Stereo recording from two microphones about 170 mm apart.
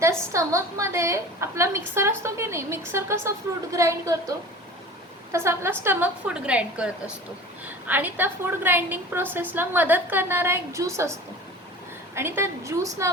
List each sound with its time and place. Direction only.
0.0 s a woman's voice: 15° right (ahead or behind)